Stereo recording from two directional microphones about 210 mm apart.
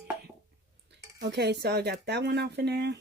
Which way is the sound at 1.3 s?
50° right (ahead or behind).